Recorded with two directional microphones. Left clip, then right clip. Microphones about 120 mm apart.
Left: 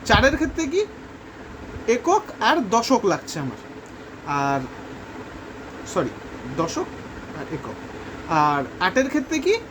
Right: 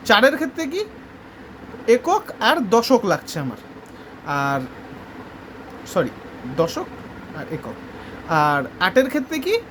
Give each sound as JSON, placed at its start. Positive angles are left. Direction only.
{"t": 0.0, "sound": "a woman's voice", "side_deg": -45}
{"t": 1.9, "sound": "speech", "side_deg": -40}
{"t": 6.0, "sound": "speech", "side_deg": -40}
{"t": 8.3, "sound": "speech", "side_deg": -40}